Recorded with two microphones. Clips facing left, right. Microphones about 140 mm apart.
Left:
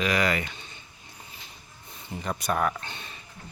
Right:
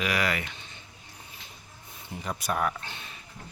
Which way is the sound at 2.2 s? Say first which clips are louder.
Left 2 dB; 5° right (ahead or behind).